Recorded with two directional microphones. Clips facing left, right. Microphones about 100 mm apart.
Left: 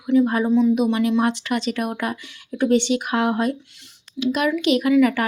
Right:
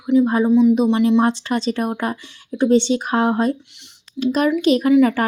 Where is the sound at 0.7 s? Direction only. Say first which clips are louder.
Right 4 dB; 30° right (ahead or behind).